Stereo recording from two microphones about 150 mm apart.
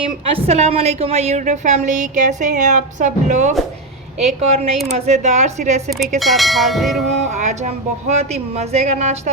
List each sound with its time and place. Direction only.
0.3 s a woman's voice: 40° right (ahead or behind)
4.4 s a woman's voice: 45° right (ahead or behind)
6.1 s speech: centre (ahead or behind)
7.3 s a woman's voice: 50° right (ahead or behind)